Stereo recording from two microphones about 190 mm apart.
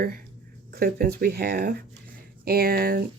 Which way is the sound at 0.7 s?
55° right (ahead or behind).